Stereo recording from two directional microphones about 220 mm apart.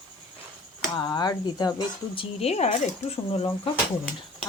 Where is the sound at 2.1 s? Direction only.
30° left (ahead or behind).